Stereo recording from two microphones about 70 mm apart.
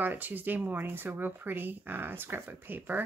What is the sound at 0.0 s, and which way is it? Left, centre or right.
Speech, right.